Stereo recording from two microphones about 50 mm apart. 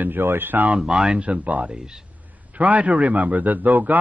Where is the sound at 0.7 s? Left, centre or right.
Centre.